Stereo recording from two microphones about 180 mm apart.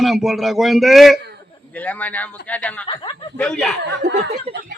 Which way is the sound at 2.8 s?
30° left (ahead or behind).